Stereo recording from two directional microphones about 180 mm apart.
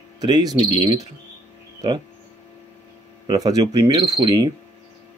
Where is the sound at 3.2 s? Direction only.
20° right (ahead or behind).